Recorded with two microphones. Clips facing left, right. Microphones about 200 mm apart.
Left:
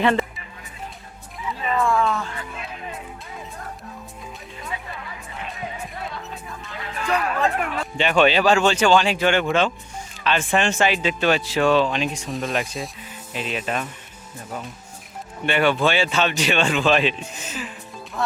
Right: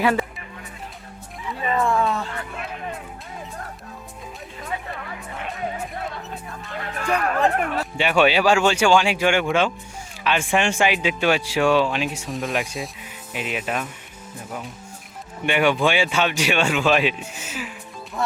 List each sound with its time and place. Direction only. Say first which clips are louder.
0.0 s speech: left 1 dB; 5° right (ahead or behind)
1.8 s speech: left 1 dB; 20° right (ahead or behind)
4.9 s speech: right 3 dB; 45° right (ahead or behind)
6.7 s speech: right 1 dB; 50° right (ahead or behind)
7.9 s speech: left 1 dB; 10° right (ahead or behind)
13.0 s speech: even; 10° right (ahead or behind)
15.4 s speech: even; 15° right (ahead or behind)